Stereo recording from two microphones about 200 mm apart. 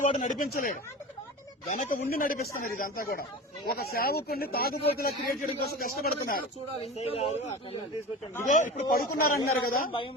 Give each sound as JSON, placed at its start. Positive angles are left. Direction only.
{"t": 0.0, "sound": "a man's voice", "side_deg": 35}
{"t": 7.0, "sound": "a man's voice", "side_deg": 30}